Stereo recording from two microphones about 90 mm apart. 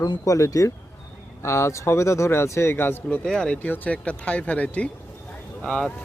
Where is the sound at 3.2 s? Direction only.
10° left (ahead or behind).